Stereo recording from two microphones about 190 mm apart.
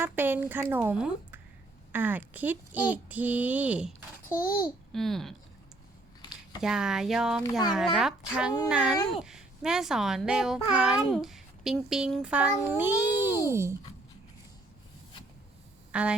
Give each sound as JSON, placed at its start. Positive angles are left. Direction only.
{"t": 0.0, "sound": "speech", "side_deg": -10}
{"t": 4.3, "sound": "a child's voice", "side_deg": 15}
{"t": 4.9, "sound": "a child's voice", "side_deg": 0}
{"t": 6.6, "sound": "a child's voice", "side_deg": -5}
{"t": 15.9, "sound": "speech", "side_deg": -5}